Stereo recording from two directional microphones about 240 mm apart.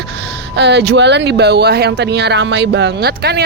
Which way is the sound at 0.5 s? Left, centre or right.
Right.